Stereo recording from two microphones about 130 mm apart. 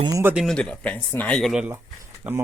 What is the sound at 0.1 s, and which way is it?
Speech, 20° right (ahead or behind).